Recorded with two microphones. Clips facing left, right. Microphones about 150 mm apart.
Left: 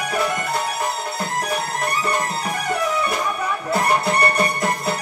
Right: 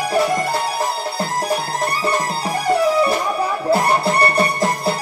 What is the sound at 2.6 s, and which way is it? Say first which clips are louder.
Music: right 8 dB; 30° right (ahead or behind).